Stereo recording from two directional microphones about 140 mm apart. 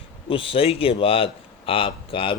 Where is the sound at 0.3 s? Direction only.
40° left (ahead or behind).